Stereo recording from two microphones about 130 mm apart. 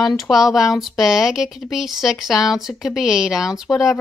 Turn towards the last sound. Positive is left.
turn(degrees=0)  # may be behind; listen again after turning